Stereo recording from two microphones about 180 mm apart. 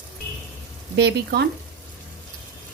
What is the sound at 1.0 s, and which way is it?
Speech, 65° right (ahead or behind).